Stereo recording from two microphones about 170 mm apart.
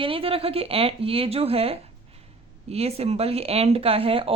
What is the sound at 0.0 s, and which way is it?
Speech, 35° right (ahead or behind).